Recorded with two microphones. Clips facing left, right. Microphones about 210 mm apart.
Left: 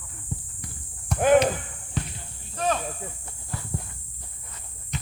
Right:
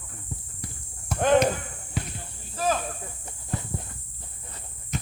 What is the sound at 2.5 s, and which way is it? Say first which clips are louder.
Snake: even; 5° right (ahead or behind).